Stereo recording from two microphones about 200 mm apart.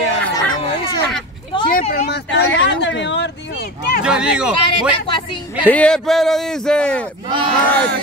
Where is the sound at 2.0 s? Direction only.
60° left (ahead or behind).